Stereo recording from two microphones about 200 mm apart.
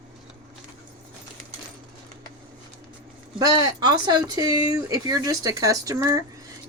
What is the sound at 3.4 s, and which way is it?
Speech, 20° right (ahead or behind).